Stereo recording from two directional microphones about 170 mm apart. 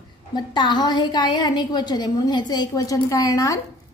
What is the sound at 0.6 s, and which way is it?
A woman's voice, 25° left (ahead or behind).